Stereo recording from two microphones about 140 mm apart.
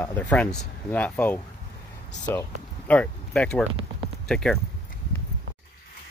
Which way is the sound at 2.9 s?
10° left (ahead or behind).